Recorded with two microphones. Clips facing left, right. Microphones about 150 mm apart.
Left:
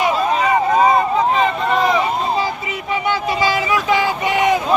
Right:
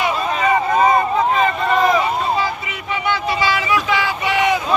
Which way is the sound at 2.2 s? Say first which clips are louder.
Even; 35° left (ahead or behind).